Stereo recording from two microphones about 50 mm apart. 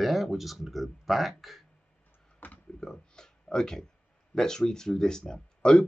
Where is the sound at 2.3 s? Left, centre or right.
Left.